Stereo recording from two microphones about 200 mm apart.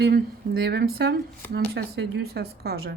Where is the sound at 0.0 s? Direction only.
50° right (ahead or behind).